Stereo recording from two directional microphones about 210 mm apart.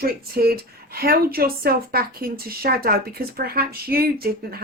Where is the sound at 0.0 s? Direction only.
45° right (ahead or behind).